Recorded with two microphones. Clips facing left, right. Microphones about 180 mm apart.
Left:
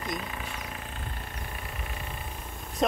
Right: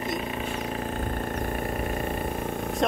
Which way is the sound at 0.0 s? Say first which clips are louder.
Right 6 dB; 25° right (ahead or behind).